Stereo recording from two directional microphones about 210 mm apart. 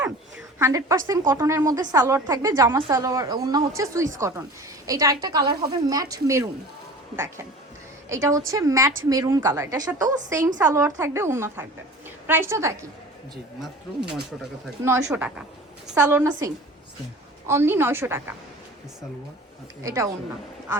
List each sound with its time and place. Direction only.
0.6 s speech: 15° right (ahead or behind)
8.1 s a woman's voice: 15° right (ahead or behind)
14.8 s speech: 15° right (ahead or behind)
19.8 s speech: 15° right (ahead or behind)